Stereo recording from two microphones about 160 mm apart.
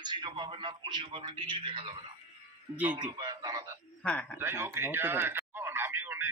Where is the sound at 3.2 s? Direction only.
25° right (ahead or behind).